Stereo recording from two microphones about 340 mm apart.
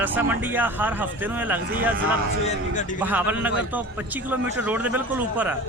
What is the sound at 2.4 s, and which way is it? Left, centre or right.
Speech, left.